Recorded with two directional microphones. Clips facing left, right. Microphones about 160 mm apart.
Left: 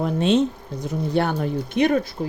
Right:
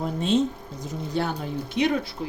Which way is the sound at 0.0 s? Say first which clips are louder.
Left 4 dB; 75° left (ahead or behind).